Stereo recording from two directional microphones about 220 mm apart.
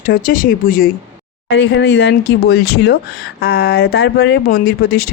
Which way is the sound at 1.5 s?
50° left (ahead or behind).